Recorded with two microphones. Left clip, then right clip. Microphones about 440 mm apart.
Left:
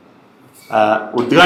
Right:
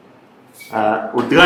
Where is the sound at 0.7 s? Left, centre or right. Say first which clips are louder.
Left 3 dB; centre.